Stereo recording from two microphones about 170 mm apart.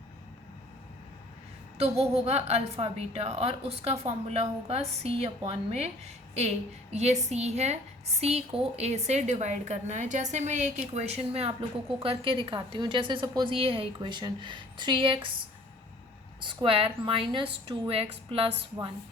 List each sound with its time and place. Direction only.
1.8 s a woman's voice: 35° right (ahead or behind)
6.9 s a woman's voice: 40° right (ahead or behind)